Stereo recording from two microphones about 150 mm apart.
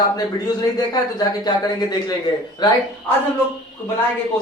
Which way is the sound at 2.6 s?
30° left (ahead or behind).